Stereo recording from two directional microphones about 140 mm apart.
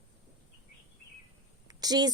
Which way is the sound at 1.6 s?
30° right (ahead or behind).